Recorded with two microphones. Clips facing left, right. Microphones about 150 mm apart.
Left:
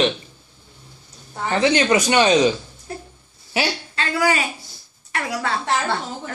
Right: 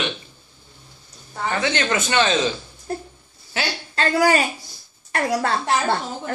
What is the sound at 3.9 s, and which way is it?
A woman's voice, 40° right (ahead or behind).